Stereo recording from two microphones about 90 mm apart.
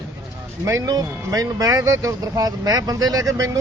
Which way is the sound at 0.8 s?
45° right (ahead or behind).